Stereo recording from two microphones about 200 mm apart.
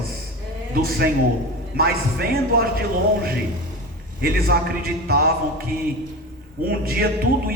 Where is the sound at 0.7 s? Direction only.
50° right (ahead or behind).